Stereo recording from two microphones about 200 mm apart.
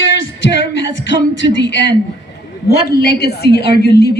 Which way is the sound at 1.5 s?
60° left (ahead or behind).